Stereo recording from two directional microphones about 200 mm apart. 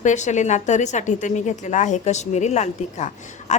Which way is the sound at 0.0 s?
35° left (ahead or behind).